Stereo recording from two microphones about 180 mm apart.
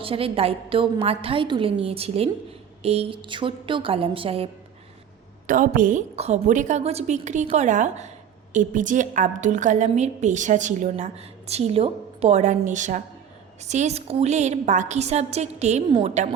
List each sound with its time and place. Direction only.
0.0 s a woman's voice: 30° right (ahead or behind)
5.5 s a woman's voice: 50° right (ahead or behind)